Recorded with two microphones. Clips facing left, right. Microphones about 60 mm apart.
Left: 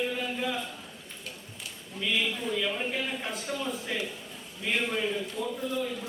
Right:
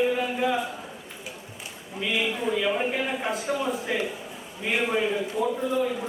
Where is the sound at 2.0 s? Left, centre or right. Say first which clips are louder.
Right 3 dB; centre.